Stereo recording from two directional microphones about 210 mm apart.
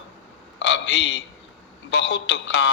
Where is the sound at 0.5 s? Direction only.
55° left (ahead or behind).